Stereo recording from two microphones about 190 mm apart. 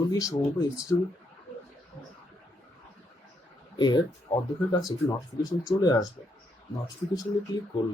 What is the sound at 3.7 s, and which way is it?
Speech, 20° left (ahead or behind).